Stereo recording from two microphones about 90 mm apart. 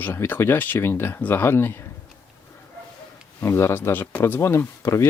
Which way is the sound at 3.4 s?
30° left (ahead or behind).